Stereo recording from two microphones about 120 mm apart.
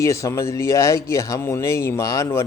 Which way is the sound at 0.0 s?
25° left (ahead or behind).